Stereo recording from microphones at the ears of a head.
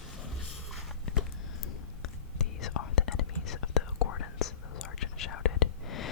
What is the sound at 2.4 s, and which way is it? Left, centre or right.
Whispering, left.